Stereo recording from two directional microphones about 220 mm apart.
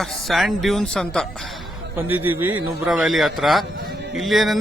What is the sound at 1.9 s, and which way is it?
Speech, 10° right (ahead or behind).